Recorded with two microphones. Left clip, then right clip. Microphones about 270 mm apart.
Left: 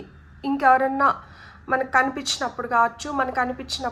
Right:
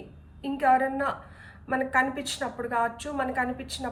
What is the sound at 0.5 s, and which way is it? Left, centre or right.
A woman's voice, centre.